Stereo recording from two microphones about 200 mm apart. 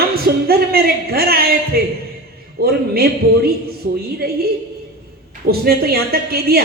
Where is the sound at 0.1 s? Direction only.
50° right (ahead or behind).